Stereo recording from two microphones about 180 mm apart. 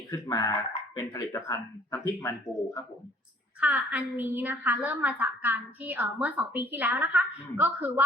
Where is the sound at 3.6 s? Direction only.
10° right (ahead or behind).